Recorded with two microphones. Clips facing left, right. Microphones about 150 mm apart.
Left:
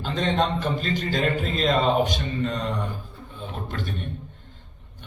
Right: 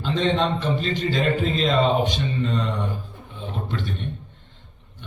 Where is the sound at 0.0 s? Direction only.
45° left (ahead or behind).